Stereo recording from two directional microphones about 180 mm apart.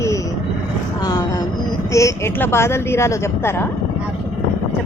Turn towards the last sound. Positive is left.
turn(degrees=15)  # may be behind; listen again after turning